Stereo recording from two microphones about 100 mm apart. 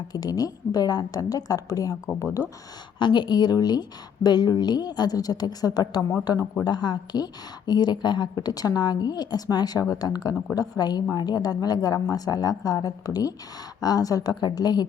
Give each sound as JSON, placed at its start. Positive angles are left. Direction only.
{"t": 0.1, "sound": "a woman's voice", "side_deg": 40}
{"t": 3.0, "sound": "a woman's voice", "side_deg": 50}